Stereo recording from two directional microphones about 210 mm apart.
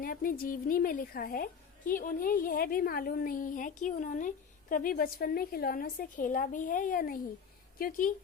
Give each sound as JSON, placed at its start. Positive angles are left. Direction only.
{"t": 0.0, "sound": "a woman's voice", "side_deg": 45}